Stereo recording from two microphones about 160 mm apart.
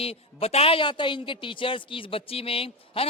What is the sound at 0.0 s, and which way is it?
A woman's voice, 35° left (ahead or behind).